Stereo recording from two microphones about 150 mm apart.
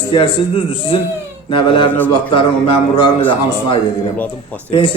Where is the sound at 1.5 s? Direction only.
35° left (ahead or behind).